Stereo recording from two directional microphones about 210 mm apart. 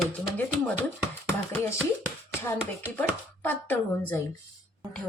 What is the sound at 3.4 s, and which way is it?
Speech, 10° left (ahead or behind).